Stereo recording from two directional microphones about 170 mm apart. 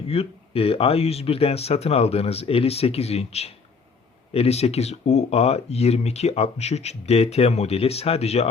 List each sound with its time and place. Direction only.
0.1 s speech: 35° left (ahead or behind)